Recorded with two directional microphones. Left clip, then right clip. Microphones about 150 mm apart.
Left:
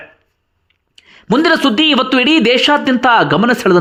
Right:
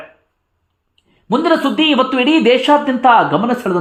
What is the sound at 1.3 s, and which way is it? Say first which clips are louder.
Speech: left 2 dB; 30° left (ahead or behind).